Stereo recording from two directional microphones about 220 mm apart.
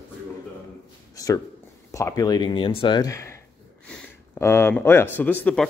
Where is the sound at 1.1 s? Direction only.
15° left (ahead or behind).